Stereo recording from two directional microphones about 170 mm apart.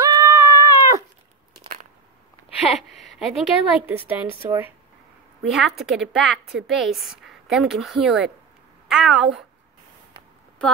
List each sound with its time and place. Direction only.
0.0 s cat: 20° right (ahead or behind)
2.7 s a woman's voice: centre (ahead or behind)
5.4 s a woman's voice: centre (ahead or behind)